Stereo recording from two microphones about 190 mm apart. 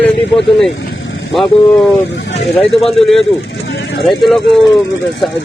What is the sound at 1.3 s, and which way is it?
Speech, centre (ahead or behind).